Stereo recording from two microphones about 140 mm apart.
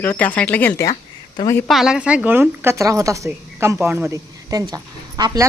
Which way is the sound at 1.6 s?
Centre (ahead or behind).